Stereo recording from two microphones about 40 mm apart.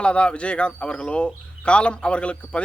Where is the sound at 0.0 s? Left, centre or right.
Left.